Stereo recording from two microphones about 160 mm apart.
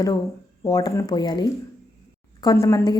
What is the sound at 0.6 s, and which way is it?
A woman's voice, 25° left (ahead or behind).